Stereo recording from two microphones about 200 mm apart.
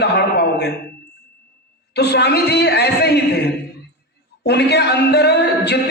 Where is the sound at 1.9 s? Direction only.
55° left (ahead or behind).